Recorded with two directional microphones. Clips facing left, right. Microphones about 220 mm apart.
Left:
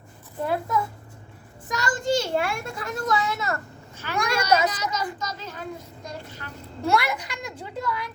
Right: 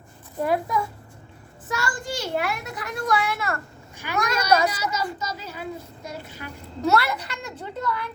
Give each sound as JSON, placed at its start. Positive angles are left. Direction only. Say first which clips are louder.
{"t": 0.4, "sound": "a child's voice", "louder": "right 2 dB", "side_deg": -15}
{"t": 1.6, "sound": "a child's voice", "louder": "left 4 dB", "side_deg": 20}
{"t": 3.9, "sound": "a child's voice", "louder": "even", "side_deg": -15}
{"t": 6.9, "sound": "a woman's voice", "louder": "left 1 dB", "side_deg": 15}